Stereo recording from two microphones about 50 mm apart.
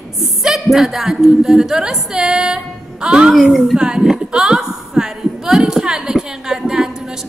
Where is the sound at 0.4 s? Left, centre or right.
Centre.